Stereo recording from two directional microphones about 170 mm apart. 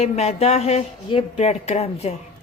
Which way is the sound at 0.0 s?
40° left (ahead or behind).